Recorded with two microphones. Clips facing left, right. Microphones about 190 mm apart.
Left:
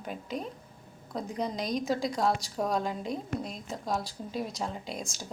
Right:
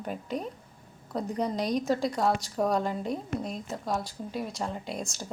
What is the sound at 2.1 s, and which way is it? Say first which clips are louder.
Speech: right 2 dB; 10° right (ahead or behind).